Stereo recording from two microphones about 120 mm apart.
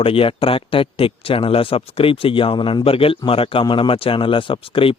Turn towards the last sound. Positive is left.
turn(degrees=50)  # may be behind; listen again after turning